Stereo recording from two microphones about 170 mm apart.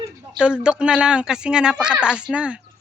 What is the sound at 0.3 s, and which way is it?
A woman's voice, 5° right (ahead or behind).